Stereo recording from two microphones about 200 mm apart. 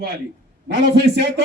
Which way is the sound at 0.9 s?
55° right (ahead or behind).